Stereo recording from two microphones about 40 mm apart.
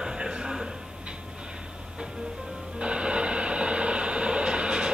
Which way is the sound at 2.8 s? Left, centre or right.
Right.